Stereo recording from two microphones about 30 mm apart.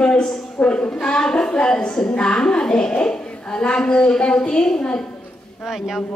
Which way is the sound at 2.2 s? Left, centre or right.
Left.